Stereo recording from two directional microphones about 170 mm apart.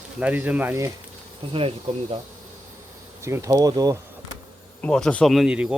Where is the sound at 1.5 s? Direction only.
35° right (ahead or behind).